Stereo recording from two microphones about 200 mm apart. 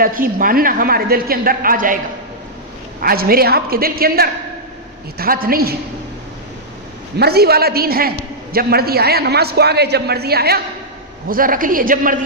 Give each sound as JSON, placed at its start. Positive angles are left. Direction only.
{"t": 0.0, "sound": "a man's voice", "side_deg": -45}
{"t": 3.0, "sound": "a man's voice", "side_deg": -50}
{"t": 7.2, "sound": "a man's voice", "side_deg": -50}